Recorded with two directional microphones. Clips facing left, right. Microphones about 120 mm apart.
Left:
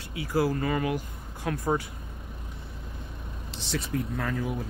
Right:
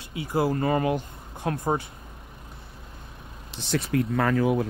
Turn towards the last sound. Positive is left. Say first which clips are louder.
# right 8 dB
turn(degrees=-75)  # may be behind; listen again after turning